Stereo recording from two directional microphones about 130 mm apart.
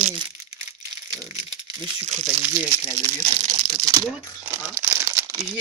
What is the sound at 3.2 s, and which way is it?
Speech, 30° right (ahead or behind).